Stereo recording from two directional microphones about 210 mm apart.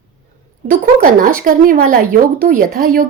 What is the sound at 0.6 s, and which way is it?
Speech, 40° right (ahead or behind).